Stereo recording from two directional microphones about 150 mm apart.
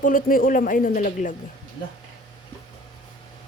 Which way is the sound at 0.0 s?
65° left (ahead or behind).